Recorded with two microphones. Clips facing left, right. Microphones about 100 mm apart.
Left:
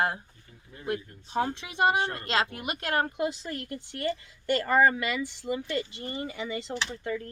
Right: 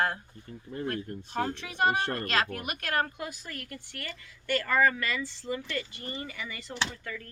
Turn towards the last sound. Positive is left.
turn(degrees=25)  # may be behind; listen again after turning